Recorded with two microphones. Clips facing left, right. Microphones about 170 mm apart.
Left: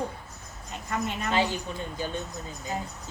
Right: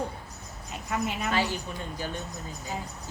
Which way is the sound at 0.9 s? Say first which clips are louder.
Right 1 dB; 5° right (ahead or behind).